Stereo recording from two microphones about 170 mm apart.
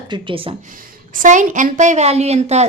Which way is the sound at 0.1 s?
30° right (ahead or behind).